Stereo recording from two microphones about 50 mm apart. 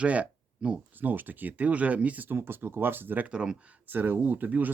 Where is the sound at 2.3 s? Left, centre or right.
Right.